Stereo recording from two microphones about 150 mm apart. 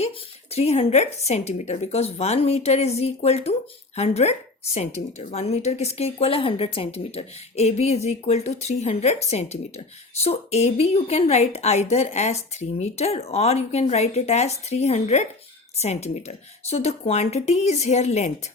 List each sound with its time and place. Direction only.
0.5 s speech: 45° left (ahead or behind)